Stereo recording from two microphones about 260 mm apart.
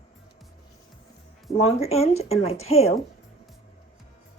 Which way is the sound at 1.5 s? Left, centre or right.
Left.